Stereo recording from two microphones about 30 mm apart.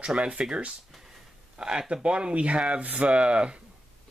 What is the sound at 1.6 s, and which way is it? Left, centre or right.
Speech, right.